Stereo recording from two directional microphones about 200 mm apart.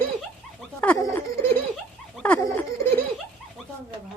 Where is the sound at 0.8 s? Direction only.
10° left (ahead or behind).